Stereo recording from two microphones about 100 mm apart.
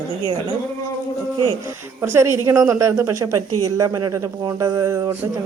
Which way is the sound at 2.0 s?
25° right (ahead or behind).